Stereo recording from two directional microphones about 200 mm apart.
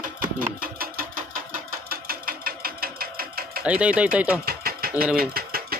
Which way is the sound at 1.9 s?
45° right (ahead or behind).